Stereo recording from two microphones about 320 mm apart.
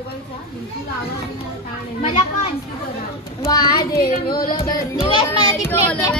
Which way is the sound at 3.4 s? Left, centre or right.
Centre.